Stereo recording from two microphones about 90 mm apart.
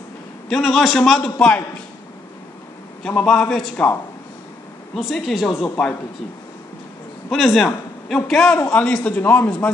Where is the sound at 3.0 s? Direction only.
5° left (ahead or behind).